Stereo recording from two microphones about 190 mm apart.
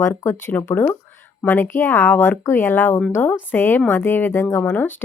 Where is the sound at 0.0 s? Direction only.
15° left (ahead or behind).